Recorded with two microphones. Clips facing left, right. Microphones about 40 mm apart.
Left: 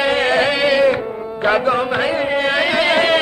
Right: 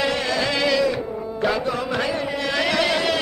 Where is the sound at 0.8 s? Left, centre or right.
Left.